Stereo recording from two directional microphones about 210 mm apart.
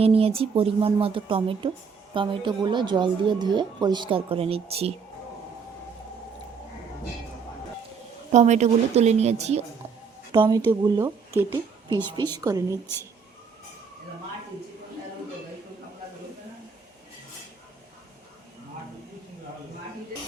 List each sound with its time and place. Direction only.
0.0 s speech: 25° right (ahead or behind)
8.3 s a woman's voice: 35° right (ahead or behind); by 12.8 s 15° right (ahead or behind)